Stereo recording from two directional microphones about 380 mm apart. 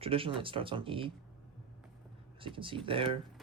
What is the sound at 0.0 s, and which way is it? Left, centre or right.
Speech, centre.